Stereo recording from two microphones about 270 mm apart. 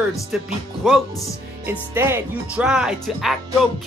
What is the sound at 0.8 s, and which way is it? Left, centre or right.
Speech, centre.